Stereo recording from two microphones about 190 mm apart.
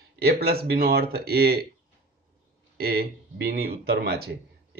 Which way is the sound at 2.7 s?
55° right (ahead or behind).